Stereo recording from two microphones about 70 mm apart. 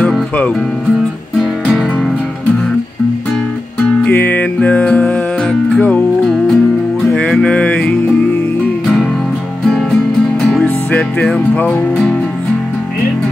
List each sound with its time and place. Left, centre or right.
4.1 s music: left
9.7 s music: centre
10.6 s music: centre